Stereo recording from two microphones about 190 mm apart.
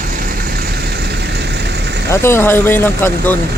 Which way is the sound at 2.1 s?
15° left (ahead or behind).